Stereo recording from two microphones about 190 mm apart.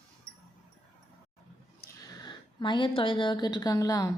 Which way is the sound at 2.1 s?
20° left (ahead or behind).